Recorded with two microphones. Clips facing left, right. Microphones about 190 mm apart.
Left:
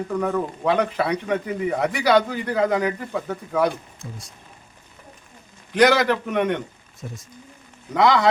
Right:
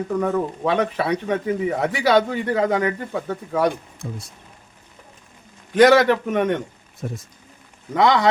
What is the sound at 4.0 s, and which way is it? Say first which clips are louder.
Speech: right 10 dB; 65° right (ahead or behind).